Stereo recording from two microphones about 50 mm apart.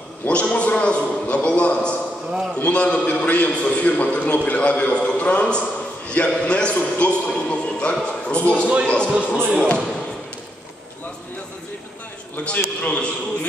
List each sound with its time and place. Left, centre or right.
0.3 s a man's voice: left
12.4 s a man's voice: left